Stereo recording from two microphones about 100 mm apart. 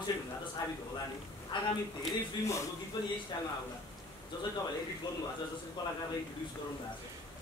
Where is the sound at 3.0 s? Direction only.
35° left (ahead or behind).